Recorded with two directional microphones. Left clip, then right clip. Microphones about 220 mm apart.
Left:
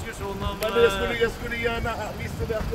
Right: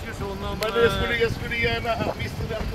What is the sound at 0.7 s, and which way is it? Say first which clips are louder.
Speech: left 1 dB; 20° left (ahead or behind).